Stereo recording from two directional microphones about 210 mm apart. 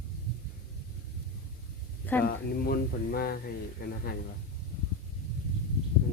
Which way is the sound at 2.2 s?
45° left (ahead or behind).